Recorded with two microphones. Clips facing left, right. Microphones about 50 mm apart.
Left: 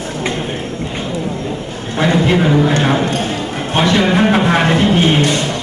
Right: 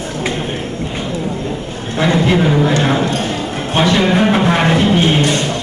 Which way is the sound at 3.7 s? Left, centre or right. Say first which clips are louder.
Even; centre.